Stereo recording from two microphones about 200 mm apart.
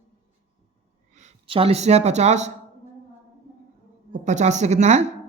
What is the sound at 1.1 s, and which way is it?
Speech, 35° right (ahead or behind).